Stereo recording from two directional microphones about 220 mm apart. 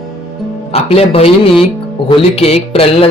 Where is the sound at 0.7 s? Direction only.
25° left (ahead or behind).